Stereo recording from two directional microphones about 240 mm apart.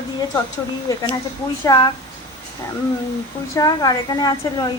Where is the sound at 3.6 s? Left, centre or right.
Centre.